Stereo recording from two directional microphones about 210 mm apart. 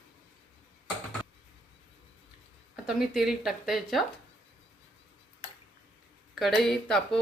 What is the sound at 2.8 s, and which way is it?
Speech, centre (ahead or behind).